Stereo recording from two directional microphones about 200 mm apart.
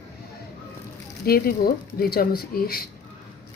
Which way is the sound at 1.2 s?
50° left (ahead or behind).